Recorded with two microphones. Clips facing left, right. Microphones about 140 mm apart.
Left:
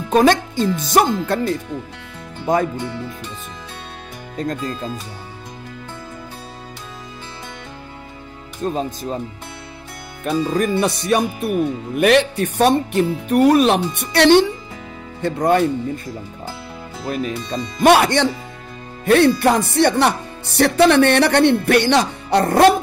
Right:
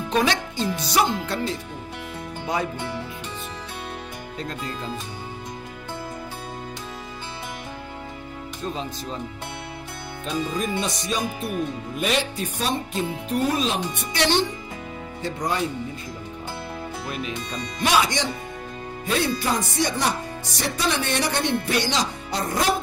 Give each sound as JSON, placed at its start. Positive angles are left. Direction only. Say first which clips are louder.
{"t": 0.1, "sound": "speech", "louder": "left 9 dB", "side_deg": 50}
{"t": 4.4, "sound": "speech", "louder": "left 8 dB", "side_deg": 45}
{"t": 8.6, "sound": "speech", "louder": "left 8 dB", "side_deg": 50}
{"t": 10.2, "sound": "speech", "louder": "left 8 dB", "side_deg": 65}
{"t": 17.1, "sound": "speech", "louder": "left 10 dB", "side_deg": 45}
{"t": 17.9, "sound": "speech", "louder": "left 6 dB", "side_deg": 60}